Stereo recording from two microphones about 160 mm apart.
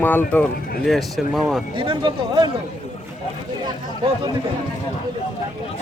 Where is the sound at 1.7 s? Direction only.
30° right (ahead or behind).